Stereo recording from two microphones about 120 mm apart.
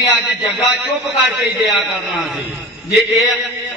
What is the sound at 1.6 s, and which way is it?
Speech, centre (ahead or behind).